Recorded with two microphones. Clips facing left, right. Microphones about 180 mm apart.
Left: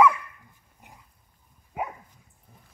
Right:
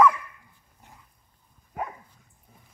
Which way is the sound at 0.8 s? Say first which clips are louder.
Left 1 dB; 15° left (ahead or behind).